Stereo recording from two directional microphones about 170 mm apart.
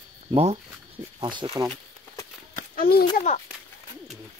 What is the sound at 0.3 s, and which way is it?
Speech, 35° right (ahead or behind).